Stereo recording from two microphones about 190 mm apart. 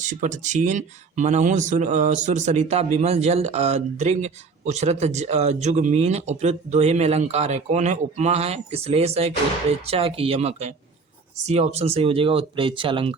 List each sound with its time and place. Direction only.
0.0 s speech: 40° right (ahead or behind)